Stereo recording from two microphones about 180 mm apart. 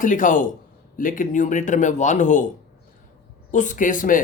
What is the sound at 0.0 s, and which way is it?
Speech, 45° left (ahead or behind).